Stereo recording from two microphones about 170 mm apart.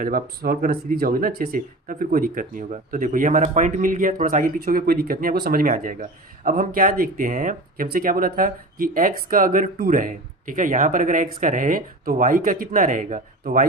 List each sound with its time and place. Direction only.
0.0 s speech: 55° right (ahead or behind)